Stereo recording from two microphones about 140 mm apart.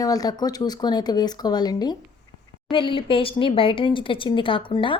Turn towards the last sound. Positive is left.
turn(degrees=35)  # may be behind; listen again after turning